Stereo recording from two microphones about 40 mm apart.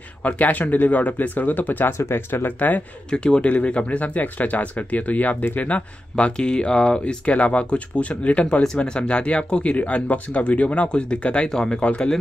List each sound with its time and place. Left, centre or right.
0.2 s speech: left
1.9 s speech: left
3.1 s speech: left
8.8 s speech: left
11.4 s speech: centre
11.8 s speech: left